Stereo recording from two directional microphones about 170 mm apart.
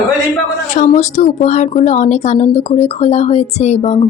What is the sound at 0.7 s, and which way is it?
A woman's voice, 45° left (ahead or behind).